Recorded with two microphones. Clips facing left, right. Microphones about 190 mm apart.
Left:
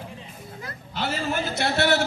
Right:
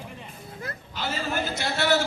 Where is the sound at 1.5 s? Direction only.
60° left (ahead or behind).